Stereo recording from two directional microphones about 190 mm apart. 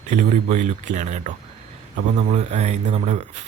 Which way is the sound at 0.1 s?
35° right (ahead or behind).